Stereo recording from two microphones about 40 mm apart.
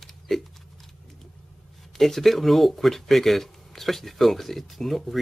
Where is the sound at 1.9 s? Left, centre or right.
Centre.